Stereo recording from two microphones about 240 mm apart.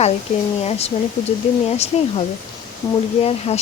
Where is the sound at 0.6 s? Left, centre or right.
Left.